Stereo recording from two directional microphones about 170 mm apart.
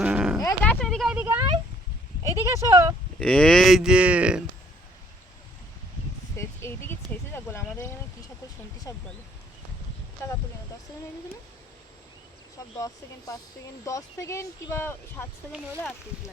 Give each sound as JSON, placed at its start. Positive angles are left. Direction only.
{"t": 0.0, "sound": "dog", "side_deg": -5}
{"t": 0.6, "sound": "a sound", "side_deg": 5}
{"t": 2.4, "sound": "speech", "side_deg": -15}
{"t": 3.2, "sound": "speech", "side_deg": 5}
{"t": 6.3, "sound": "speech", "side_deg": 15}
{"t": 8.9, "sound": "speech", "side_deg": 20}
{"t": 10.2, "sound": "speech", "side_deg": 15}
{"t": 12.8, "sound": "speech", "side_deg": 20}
{"t": 15.5, "sound": "speech", "side_deg": -10}